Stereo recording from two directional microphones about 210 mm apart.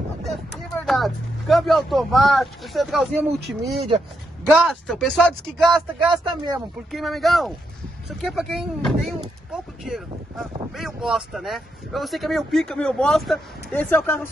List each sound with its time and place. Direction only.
0.8 s speech: centre (ahead or behind)
4.5 s speech: 5° right (ahead or behind)
5.9 s speech: 20° right (ahead or behind)
6.9 s speech: centre (ahead or behind)